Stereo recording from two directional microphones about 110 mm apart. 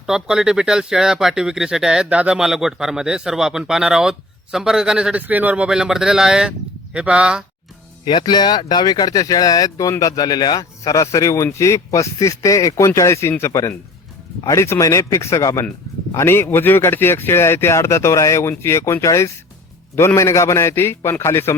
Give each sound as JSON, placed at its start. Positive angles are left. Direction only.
{"t": 0.0, "sound": "speech", "side_deg": -5}
{"t": 8.0, "sound": "speech", "side_deg": 40}